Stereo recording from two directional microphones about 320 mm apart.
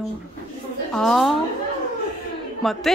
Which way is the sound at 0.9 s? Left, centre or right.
Centre.